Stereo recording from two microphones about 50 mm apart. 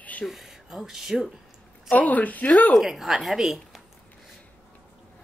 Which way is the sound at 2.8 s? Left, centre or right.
Centre.